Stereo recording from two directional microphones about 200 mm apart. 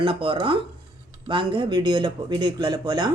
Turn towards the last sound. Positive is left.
turn(degrees=-20)  # may be behind; listen again after turning